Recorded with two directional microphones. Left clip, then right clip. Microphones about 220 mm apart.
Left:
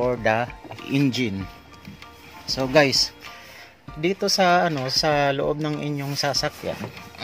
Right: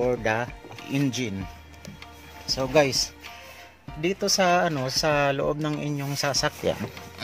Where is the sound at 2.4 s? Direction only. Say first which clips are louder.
Left 3 dB; 10° left (ahead or behind).